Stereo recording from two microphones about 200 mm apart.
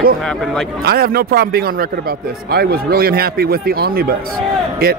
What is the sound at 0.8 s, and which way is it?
A man's voice, 50° right (ahead or behind).